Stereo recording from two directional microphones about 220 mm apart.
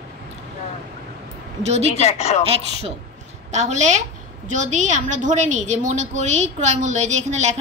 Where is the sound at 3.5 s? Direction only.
30° right (ahead or behind).